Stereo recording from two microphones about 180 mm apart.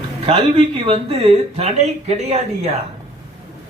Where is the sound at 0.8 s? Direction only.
30° right (ahead or behind).